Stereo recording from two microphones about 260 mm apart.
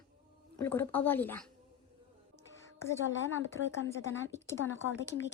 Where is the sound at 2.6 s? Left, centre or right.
Centre.